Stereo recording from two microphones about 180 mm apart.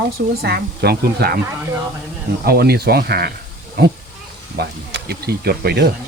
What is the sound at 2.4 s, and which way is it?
Speech, 60° right (ahead or behind).